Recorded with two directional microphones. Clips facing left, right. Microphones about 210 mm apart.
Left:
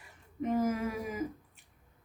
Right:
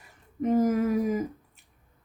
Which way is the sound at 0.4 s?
40° right (ahead or behind).